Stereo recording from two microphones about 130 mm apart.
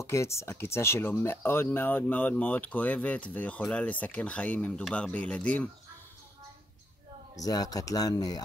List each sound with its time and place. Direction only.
0.0 s speech: 20° left (ahead or behind)
7.3 s speech: 30° left (ahead or behind)